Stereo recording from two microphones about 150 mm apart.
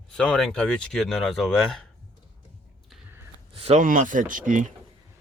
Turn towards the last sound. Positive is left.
turn(degrees=-60)  # may be behind; listen again after turning